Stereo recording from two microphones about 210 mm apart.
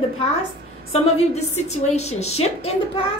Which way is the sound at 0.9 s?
30° left (ahead or behind).